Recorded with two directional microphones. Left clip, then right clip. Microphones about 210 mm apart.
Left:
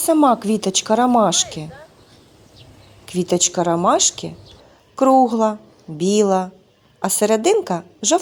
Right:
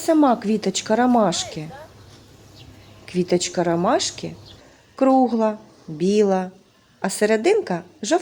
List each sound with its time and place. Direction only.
0.0 s a woman's voice: 15° left (ahead or behind)
3.1 s a woman's voice: 20° left (ahead or behind)